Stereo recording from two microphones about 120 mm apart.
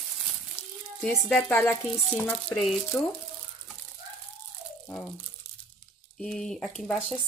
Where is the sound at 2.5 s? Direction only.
Centre (ahead or behind).